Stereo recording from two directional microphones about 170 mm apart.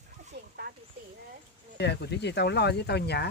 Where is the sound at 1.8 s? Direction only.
85° left.